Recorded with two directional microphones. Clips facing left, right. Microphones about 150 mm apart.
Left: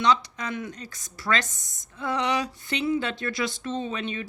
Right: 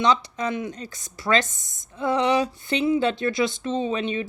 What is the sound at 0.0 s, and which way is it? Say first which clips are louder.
Speech: right 2 dB; 25° right (ahead or behind).